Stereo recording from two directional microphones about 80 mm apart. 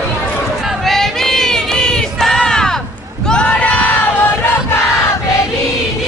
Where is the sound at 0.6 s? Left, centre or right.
Centre.